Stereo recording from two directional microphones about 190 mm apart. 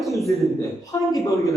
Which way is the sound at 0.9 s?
20° left (ahead or behind).